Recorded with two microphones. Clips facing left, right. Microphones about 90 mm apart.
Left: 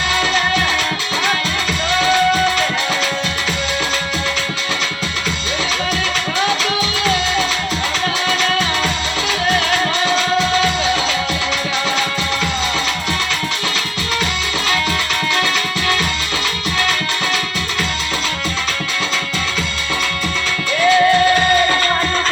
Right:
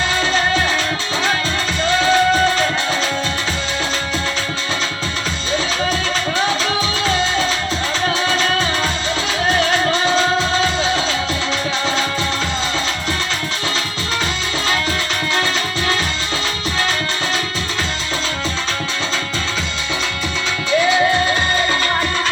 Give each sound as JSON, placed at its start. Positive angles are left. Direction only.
{"t": 0.2, "sound": "music", "side_deg": -30}
{"t": 1.9, "sound": "music", "side_deg": -35}
{"t": 6.4, "sound": "music", "side_deg": -30}
{"t": 20.9, "sound": "music", "side_deg": -25}